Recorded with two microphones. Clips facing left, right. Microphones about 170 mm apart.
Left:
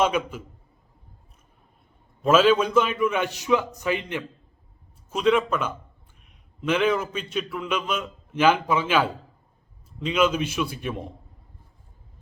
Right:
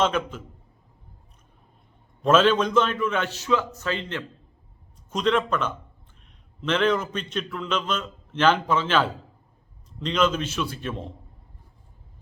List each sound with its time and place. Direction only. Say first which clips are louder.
0.0 s a man's voice: left 1 dB; 10° left (ahead or behind)
2.2 s a man's voice: left 1 dB; 5° left (ahead or behind)